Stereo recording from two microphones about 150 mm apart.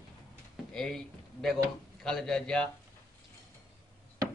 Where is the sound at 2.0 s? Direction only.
5° left (ahead or behind).